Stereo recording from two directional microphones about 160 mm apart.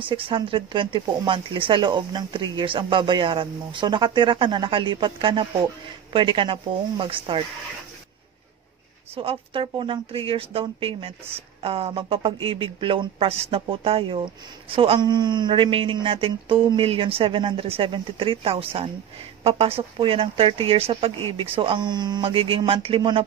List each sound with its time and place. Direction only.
0.0 s speech: 35° right (ahead or behind)
9.1 s speech: 35° right (ahead or behind)